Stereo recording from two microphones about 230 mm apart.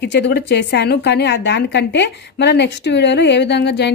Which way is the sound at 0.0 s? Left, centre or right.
Left.